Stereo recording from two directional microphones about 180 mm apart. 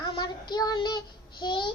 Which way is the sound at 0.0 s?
25° left (ahead or behind).